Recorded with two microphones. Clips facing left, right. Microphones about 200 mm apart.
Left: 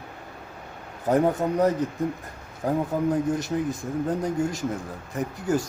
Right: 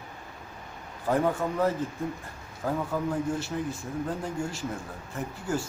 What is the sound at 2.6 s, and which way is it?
Speech, 20° left (ahead or behind).